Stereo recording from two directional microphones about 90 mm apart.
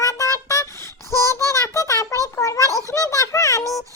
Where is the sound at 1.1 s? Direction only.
35° left (ahead or behind).